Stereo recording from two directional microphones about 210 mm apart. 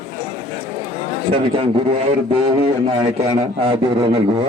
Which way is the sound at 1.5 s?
25° right (ahead or behind).